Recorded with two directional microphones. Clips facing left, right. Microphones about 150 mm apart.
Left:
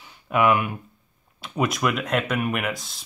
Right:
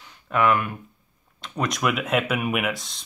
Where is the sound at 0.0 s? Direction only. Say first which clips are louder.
Left 1 dB; 10° left (ahead or behind).